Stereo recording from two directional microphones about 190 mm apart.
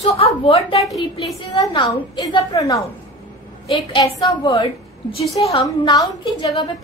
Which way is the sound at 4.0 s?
20° left (ahead or behind).